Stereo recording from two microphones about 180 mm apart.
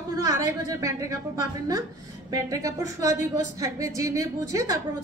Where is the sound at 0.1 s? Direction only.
20° right (ahead or behind).